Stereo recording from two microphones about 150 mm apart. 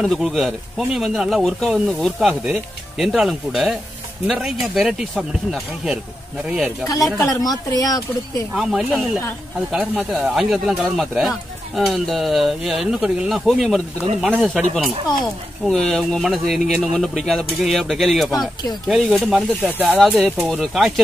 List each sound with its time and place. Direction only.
0.0 s speech: centre (ahead or behind)
7.2 s speech: 25° left (ahead or behind)
8.5 s speech: 5° right (ahead or behind)